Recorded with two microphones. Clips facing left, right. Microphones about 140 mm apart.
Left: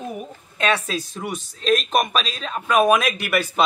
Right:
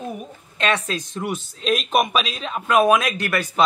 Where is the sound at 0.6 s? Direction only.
5° left (ahead or behind).